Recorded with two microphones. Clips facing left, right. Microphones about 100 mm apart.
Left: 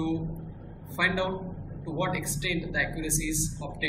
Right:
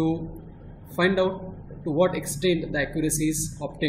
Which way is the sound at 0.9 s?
20° right (ahead or behind).